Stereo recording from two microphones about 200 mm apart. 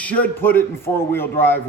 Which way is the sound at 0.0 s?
5° left (ahead or behind).